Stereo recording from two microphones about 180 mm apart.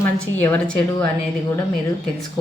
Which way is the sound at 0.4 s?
15° left (ahead or behind).